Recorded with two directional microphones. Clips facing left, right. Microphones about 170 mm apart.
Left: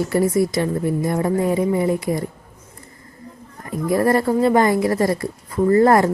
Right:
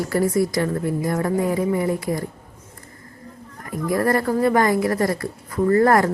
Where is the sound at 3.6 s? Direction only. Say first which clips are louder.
Left 3 dB; 25° left (ahead or behind).